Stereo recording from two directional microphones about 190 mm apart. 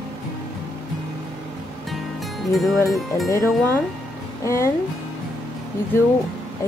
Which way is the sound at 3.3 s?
15° left (ahead or behind).